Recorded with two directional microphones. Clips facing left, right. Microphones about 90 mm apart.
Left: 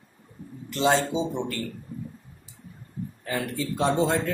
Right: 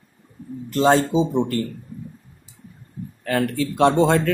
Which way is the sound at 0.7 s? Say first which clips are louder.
Right 6 dB; 40° right (ahead or behind).